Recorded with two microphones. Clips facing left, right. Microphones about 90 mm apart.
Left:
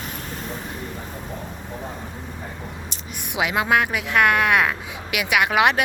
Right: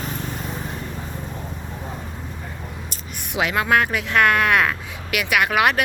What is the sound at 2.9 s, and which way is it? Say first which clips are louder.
A woman's voice: right 1 dB; 15° left (ahead or behind).